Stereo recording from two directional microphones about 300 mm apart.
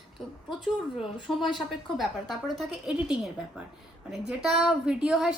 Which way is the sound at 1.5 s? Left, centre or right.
Centre.